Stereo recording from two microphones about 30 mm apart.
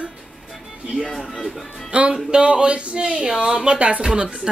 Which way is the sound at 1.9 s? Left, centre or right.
Right.